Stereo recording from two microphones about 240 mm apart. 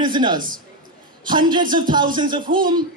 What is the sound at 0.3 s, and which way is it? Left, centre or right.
Speech, right.